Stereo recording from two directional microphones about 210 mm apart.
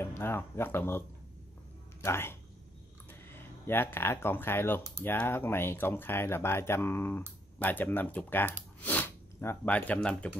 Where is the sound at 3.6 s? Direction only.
10° left (ahead or behind).